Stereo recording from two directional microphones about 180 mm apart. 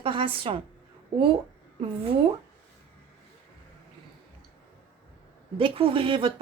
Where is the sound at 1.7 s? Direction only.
30° right (ahead or behind).